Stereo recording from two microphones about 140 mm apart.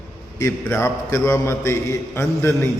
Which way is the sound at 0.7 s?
20° left (ahead or behind).